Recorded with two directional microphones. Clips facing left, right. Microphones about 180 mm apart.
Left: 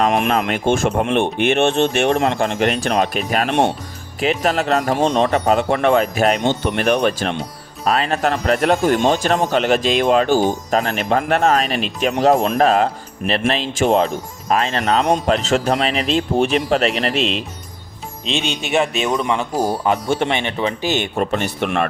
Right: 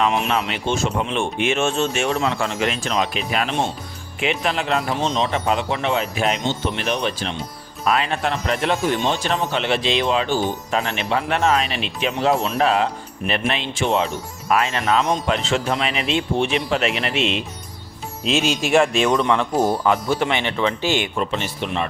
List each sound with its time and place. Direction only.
0.0 s speech: 50° left (ahead or behind)
7.9 s speech: 40° left (ahead or behind)
18.3 s speech: centre (ahead or behind)
20.1 s speech: 25° left (ahead or behind)
21.2 s speech: 50° left (ahead or behind)